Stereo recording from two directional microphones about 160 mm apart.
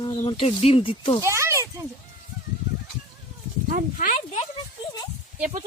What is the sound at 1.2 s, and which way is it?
Speech, 15° right (ahead or behind).